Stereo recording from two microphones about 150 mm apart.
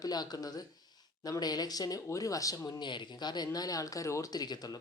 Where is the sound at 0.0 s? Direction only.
25° left (ahead or behind).